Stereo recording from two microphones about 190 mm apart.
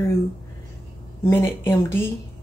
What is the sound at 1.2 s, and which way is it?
Speech, 15° left (ahead or behind).